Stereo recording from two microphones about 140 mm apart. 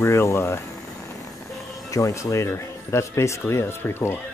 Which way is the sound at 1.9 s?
20° left (ahead or behind).